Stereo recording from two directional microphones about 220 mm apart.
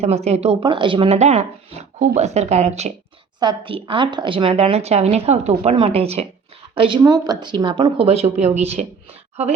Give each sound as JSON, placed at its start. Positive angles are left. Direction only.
{"t": 0.0, "sound": "speech", "side_deg": -30}